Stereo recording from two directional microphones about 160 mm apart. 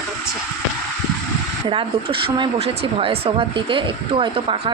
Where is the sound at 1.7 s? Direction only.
35° right (ahead or behind).